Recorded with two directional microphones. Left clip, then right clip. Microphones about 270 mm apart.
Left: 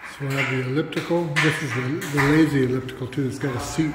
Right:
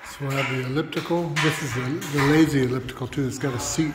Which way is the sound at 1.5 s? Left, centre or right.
Right.